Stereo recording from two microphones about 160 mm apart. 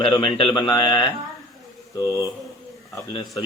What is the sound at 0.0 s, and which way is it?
A man's voice, 35° left (ahead or behind).